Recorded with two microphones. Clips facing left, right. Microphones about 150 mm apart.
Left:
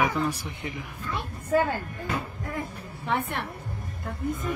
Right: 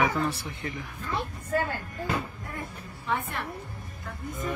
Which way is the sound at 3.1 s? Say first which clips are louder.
Left 2 dB; 70° left (ahead or behind).